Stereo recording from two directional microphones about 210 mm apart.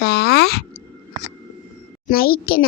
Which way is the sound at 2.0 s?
45° left (ahead or behind).